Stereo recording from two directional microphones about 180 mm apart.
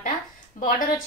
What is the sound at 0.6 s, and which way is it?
Speech, 50° left (ahead or behind).